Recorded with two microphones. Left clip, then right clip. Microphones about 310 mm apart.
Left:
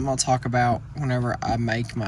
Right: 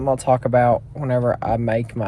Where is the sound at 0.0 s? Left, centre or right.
Centre.